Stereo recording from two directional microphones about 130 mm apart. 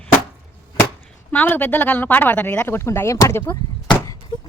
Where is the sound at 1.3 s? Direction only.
15° left (ahead or behind).